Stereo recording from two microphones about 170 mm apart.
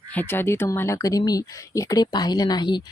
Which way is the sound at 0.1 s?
10° left (ahead or behind).